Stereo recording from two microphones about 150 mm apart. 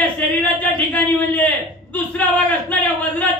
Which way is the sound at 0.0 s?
10° left (ahead or behind).